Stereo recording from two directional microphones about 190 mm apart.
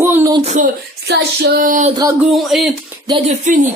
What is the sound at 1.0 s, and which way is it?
Speech, 60° right (ahead or behind).